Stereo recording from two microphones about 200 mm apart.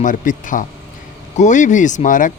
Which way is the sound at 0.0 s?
40° left (ahead or behind).